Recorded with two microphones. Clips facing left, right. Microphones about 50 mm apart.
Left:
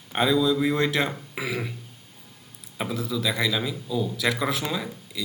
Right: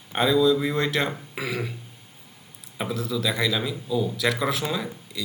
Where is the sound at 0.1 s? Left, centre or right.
Centre.